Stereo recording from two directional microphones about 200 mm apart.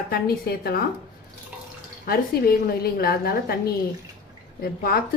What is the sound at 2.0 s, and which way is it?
A woman's voice, 50° left (ahead or behind).